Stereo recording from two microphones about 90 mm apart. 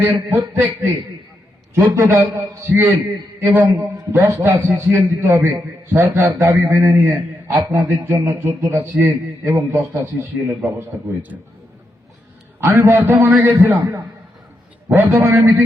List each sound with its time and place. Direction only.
0.0 s a man's voice: 20° right (ahead or behind)
1.7 s a man's voice: 30° right (ahead or behind)
11.3 s a man's voice: 15° right (ahead or behind)
12.5 s a man's voice: 30° right (ahead or behind)
13.4 s a man's voice: 25° right (ahead or behind)
14.9 s a man's voice: 30° right (ahead or behind)